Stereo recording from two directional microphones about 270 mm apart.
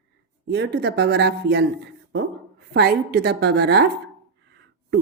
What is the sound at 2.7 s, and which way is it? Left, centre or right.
A woman's voice, right.